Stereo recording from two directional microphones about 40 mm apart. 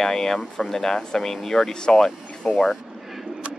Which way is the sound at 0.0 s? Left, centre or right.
Centre.